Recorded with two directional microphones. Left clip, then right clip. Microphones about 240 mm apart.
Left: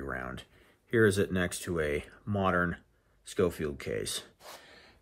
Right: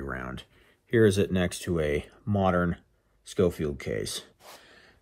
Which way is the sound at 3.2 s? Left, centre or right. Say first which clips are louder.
Right 4 dB; right.